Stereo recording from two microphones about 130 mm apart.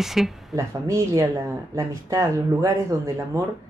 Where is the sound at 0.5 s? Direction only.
25° right (ahead or behind).